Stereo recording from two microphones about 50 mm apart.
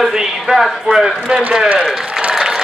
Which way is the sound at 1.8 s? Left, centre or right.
Centre.